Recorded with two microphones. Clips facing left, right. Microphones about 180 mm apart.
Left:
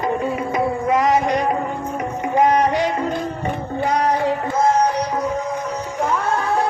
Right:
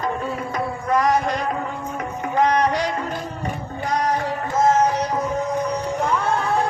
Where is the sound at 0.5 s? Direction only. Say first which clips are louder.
Left 3 dB; 20° left (ahead or behind).